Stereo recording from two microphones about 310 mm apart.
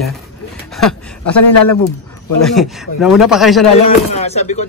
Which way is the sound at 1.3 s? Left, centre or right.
Left.